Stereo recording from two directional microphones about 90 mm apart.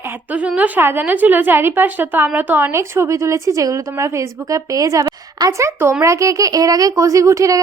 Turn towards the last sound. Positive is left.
turn(degrees=-35)  # may be behind; listen again after turning